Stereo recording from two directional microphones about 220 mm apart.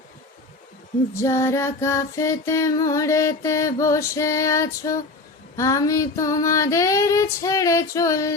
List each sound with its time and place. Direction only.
1.2 s music: 15° left (ahead or behind)